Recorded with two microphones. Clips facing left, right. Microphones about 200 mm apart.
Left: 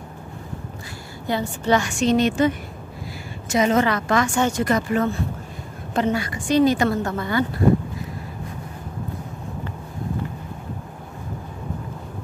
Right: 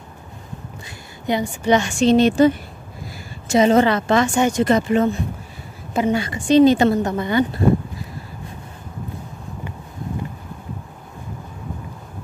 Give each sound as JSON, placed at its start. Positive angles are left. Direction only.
{"t": 1.2, "sound": "a woman's voice", "side_deg": -15}
{"t": 1.8, "sound": "a woman's voice", "side_deg": -30}